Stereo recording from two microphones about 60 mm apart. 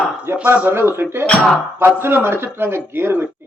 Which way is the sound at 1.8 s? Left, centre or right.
Right.